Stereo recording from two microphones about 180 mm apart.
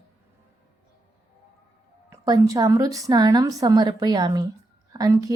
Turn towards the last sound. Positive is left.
turn(degrees=-20)  # may be behind; listen again after turning